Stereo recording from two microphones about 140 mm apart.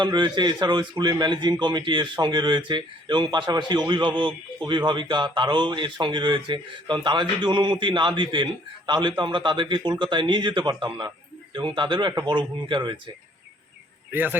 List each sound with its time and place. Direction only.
0.0 s a man's voice: 35° right (ahead or behind)
14.1 s a man's voice: 15° right (ahead or behind)